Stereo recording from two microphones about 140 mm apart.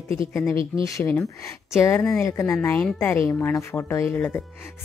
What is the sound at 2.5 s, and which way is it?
A woman's voice, 10° left (ahead or behind).